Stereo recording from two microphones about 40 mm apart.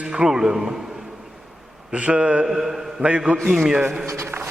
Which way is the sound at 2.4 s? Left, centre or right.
Centre.